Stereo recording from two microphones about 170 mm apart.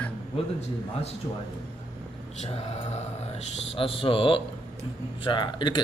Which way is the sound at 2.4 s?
40° left (ahead or behind).